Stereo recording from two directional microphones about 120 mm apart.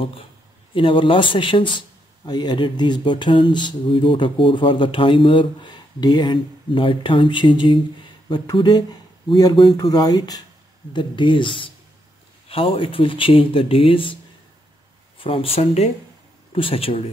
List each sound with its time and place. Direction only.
0.7 s speech: 45° left (ahead or behind)
15.1 s speech: 50° left (ahead or behind)